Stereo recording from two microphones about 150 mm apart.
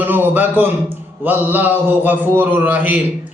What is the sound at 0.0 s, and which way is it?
Mantra, 15° right (ahead or behind).